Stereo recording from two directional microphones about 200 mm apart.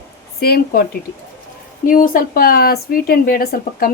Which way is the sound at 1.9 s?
45° left (ahead or behind).